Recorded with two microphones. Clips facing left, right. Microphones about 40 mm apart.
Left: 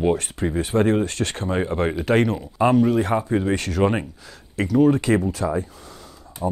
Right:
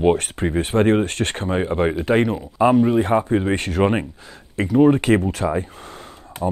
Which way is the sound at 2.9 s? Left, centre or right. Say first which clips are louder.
Right 3 dB; right.